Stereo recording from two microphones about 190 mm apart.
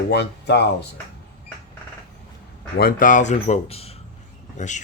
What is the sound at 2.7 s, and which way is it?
Speech, 50° left (ahead or behind).